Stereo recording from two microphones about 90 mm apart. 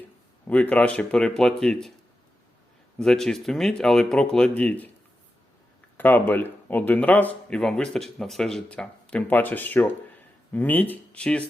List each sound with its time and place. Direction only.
0.4 s speech: 15° left (ahead or behind)
3.0 s speech: 5° left (ahead or behind)
6.0 s speech: 20° left (ahead or behind)